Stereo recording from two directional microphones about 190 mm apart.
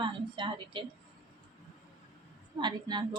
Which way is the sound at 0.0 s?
25° right (ahead or behind).